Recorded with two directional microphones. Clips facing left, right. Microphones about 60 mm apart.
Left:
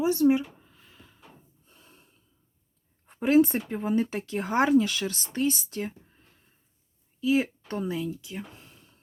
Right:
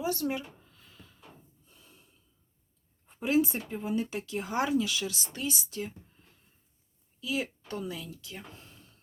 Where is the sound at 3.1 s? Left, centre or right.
Left.